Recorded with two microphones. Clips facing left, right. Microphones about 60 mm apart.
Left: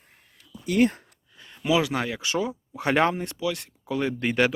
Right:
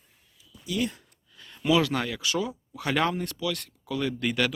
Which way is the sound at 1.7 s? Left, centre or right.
Centre.